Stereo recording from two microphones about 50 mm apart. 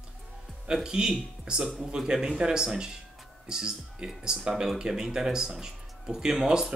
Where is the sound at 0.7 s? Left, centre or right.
Centre.